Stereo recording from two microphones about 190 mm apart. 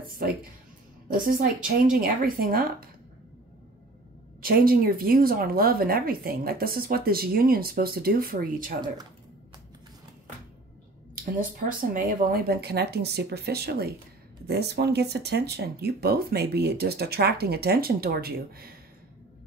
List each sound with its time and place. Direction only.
0.1 s speech: 50° right (ahead or behind)
4.4 s speech: 50° right (ahead or behind)
11.9 s speech: 50° right (ahead or behind)